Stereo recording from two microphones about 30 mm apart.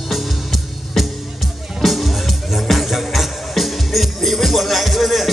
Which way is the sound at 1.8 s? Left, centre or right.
Centre.